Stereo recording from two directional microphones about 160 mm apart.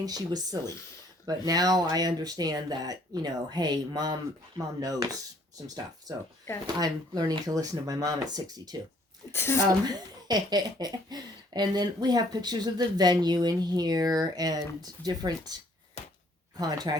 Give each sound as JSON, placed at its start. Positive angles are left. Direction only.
{"t": 0.0, "sound": "speech", "side_deg": -25}
{"t": 9.3, "sound": "speech", "side_deg": 15}
{"t": 9.6, "sound": "speech", "side_deg": -25}
{"t": 16.6, "sound": "speech", "side_deg": -25}